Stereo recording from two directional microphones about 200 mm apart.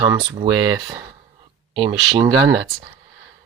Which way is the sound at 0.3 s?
25° right (ahead or behind).